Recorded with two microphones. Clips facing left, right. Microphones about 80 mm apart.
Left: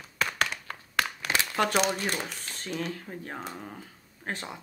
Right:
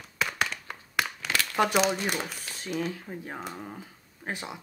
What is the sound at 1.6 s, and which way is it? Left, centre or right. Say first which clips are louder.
Speech: right 2 dB; centre.